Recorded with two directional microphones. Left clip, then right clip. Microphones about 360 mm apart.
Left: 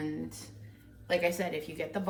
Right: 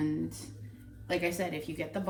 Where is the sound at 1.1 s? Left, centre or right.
Centre.